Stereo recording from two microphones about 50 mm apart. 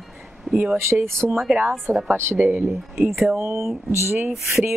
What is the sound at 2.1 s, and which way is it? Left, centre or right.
A woman's voice, right.